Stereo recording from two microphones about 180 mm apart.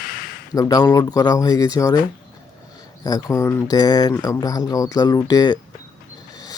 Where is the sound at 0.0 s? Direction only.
55° left (ahead or behind).